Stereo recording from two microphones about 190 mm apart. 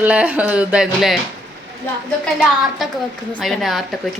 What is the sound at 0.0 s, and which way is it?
A woman's voice, 5° right (ahead or behind).